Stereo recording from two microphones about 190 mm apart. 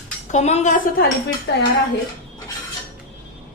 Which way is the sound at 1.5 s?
65° left (ahead or behind).